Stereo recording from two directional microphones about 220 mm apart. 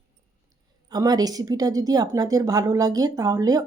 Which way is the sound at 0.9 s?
15° right (ahead or behind).